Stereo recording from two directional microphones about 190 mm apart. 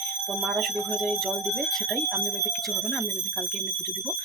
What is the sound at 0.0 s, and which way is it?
Speech, centre (ahead or behind).